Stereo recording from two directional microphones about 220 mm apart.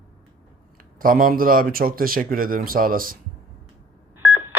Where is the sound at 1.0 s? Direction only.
40° right (ahead or behind).